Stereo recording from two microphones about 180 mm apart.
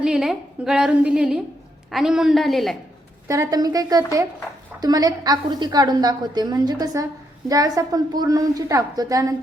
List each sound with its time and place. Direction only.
0.0 s a woman's voice: 5° right (ahead or behind)
3.2 s a woman's voice: 15° right (ahead or behind)